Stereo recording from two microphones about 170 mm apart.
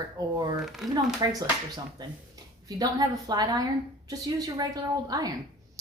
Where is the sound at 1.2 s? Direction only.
25° right (ahead or behind).